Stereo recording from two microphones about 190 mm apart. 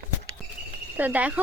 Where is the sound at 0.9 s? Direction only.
10° right (ahead or behind).